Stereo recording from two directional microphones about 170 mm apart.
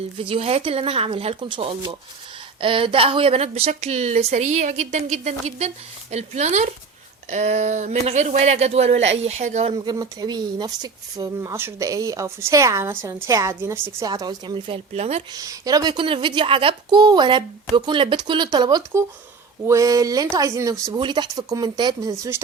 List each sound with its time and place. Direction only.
0.2 s a woman's voice: 35° right (ahead or behind)
9.7 s a woman's voice: 25° right (ahead or behind)
14.9 s a woman's voice: 40° right (ahead or behind)
15.3 s a woman's voice: 20° right (ahead or behind)